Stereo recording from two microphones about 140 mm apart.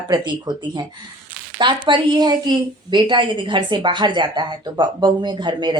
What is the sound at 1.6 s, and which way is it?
Speech, 35° right (ahead or behind).